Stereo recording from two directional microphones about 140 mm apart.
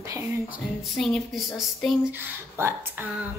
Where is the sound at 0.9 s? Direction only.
Centre (ahead or behind).